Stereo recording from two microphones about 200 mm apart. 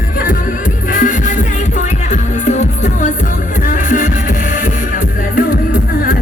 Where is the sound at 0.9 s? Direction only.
40° left (ahead or behind).